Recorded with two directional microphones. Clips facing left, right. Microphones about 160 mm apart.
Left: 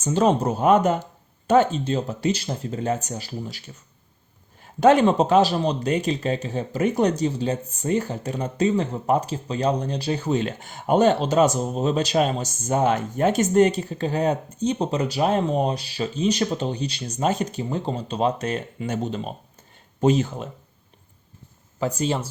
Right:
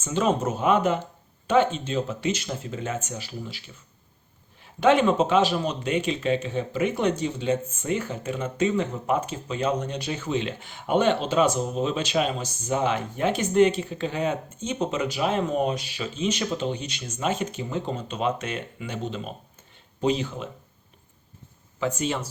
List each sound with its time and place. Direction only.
0.0 s speech: 40° left (ahead or behind)
4.6 s speech: 40° left (ahead or behind)
21.8 s speech: 35° left (ahead or behind)